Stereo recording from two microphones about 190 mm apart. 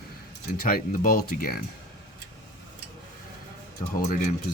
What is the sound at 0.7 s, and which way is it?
Speech, 45° left (ahead or behind).